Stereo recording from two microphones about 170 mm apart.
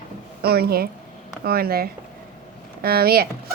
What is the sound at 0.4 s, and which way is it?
A woman's voice, 65° right (ahead or behind).